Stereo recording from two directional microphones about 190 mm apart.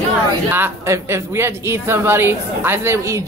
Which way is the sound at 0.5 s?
10° right (ahead or behind).